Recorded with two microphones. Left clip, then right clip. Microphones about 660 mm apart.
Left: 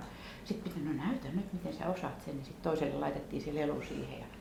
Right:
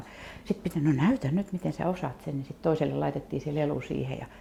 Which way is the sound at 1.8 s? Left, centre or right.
Right.